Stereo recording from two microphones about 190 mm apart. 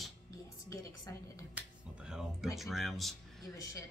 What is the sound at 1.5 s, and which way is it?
Speech, 5° right (ahead or behind).